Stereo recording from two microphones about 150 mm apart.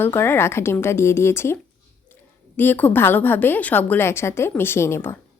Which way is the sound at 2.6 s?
10° left (ahead or behind).